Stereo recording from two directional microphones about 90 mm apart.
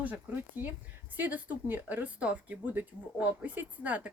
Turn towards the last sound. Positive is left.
turn(degrees=-15)  # may be behind; listen again after turning